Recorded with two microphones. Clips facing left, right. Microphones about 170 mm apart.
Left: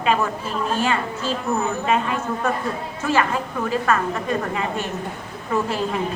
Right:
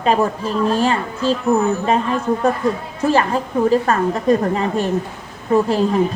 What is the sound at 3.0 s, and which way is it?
A woman's voice, 35° right (ahead or behind).